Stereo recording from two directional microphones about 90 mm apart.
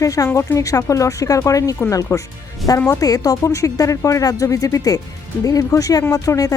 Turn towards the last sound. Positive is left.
turn(degrees=40)  # may be behind; listen again after turning